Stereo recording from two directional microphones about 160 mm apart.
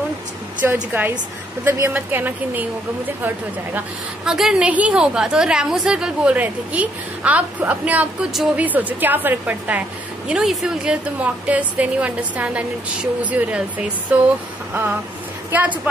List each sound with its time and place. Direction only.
0.6 s a woman's voice: 15° right (ahead or behind)
14.7 s a sound: 10° right (ahead or behind)
15.5 s a woman's voice: 10° right (ahead or behind)